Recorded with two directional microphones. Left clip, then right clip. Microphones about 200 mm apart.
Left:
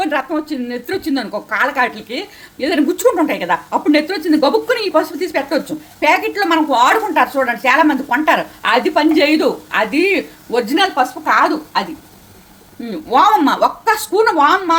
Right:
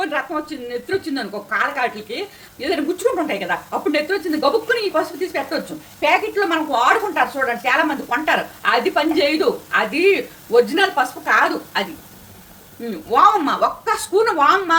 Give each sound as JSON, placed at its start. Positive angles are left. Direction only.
{"t": 0.0, "sound": "a woman's voice", "side_deg": 40}
{"t": 13.1, "sound": "a woman's voice", "side_deg": 40}